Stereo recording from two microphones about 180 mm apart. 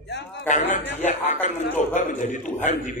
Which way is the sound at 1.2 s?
40° left (ahead or behind).